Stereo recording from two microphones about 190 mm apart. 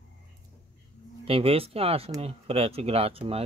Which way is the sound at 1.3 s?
30° right (ahead or behind).